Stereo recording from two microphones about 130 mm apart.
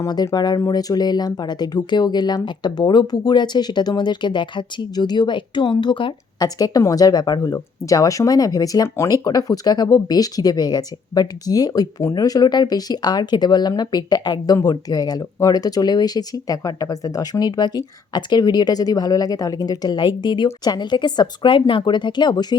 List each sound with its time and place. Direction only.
0.0 s speech: 30° left (ahead or behind)